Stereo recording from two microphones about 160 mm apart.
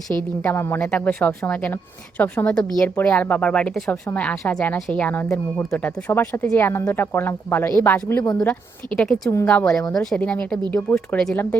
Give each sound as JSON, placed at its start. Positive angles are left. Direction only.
{"t": 0.1, "sound": "speech", "side_deg": 10}
{"t": 8.2, "sound": "speech", "side_deg": 25}
{"t": 9.0, "sound": "speech", "side_deg": 0}
{"t": 9.3, "sound": "speech", "side_deg": 15}